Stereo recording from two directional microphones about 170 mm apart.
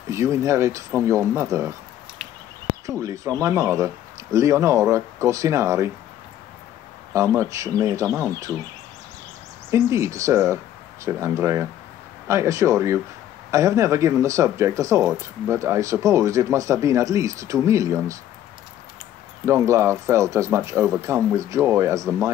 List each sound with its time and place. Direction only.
0.1 s speech: 15° right (ahead or behind)
2.9 s speech: 20° right (ahead or behind)
7.3 s speech: 20° right (ahead or behind)
9.7 s speech: 15° right (ahead or behind)
19.4 s speech: 15° right (ahead or behind)